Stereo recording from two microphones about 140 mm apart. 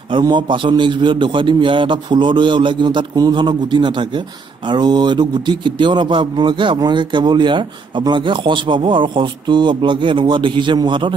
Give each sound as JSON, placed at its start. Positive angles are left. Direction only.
{"t": 0.2, "sound": "speech", "side_deg": -35}